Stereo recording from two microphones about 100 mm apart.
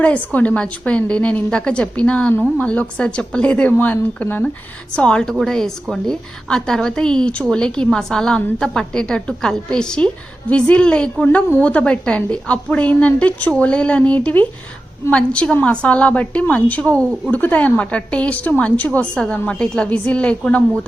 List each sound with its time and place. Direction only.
0.3 s a woman's voice: 15° left (ahead or behind)